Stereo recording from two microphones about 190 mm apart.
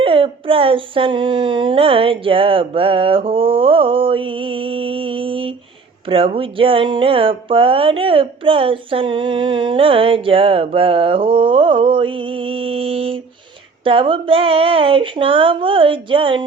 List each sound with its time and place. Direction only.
0.0 s speech: 30° right (ahead or behind)